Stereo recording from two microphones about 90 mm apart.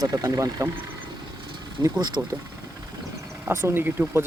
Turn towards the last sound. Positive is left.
turn(degrees=-25)  # may be behind; listen again after turning